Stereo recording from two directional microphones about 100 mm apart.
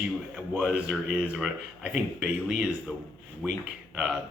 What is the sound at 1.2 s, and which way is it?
Speech, 10° right (ahead or behind).